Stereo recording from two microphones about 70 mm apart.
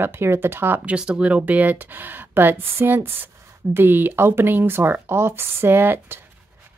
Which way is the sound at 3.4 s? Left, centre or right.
Right.